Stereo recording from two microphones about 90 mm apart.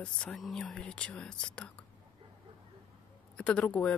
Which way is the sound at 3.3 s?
10° left (ahead or behind).